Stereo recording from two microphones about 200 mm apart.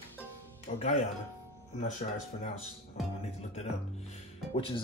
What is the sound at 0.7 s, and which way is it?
Speech, 40° left (ahead or behind).